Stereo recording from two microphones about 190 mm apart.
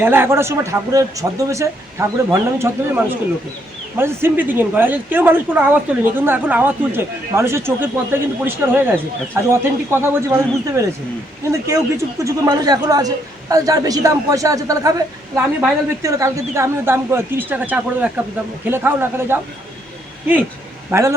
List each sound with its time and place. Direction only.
0.0 s a man's voice: 10° right (ahead or behind)
20.9 s speech: 15° right (ahead or behind)